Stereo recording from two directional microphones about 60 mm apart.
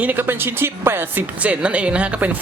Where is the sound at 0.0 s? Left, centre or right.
Right.